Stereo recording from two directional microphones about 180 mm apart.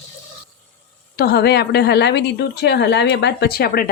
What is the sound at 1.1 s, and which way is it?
A woman's voice, 60° left (ahead or behind).